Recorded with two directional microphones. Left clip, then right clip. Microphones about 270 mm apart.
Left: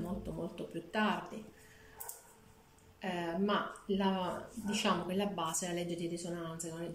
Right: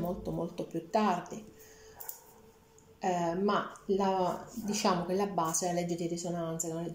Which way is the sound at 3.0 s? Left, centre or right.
Centre.